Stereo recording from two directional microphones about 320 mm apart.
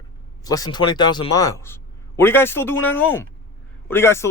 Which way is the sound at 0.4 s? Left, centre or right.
Centre.